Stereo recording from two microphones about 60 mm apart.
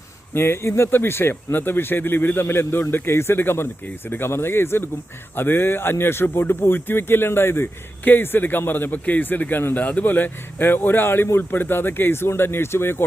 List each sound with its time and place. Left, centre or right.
0.3 s speech: left